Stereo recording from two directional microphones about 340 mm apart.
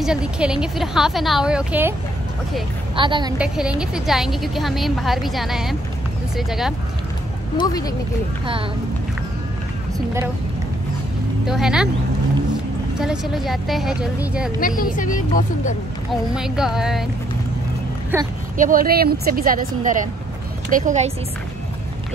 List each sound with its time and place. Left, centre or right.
0.0 s a woman's voice: centre
3.0 s a woman's voice: centre
7.5 s speech: centre
9.9 s a woman's voice: centre
11.4 s a woman's voice: centre
13.0 s a woman's voice: centre
14.8 s speech: left
16.1 s a woman's voice: centre
18.1 s a woman's voice: centre
18.6 s a woman's voice: right